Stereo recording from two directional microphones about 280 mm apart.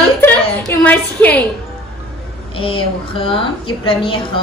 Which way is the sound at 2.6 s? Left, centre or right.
Centre.